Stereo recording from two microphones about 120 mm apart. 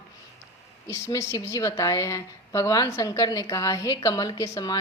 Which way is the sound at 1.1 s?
20° left (ahead or behind).